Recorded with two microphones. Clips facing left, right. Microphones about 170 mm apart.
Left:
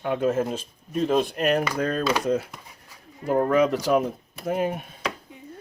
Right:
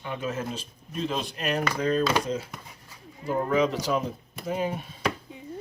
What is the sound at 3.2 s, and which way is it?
Speech, 55° left (ahead or behind).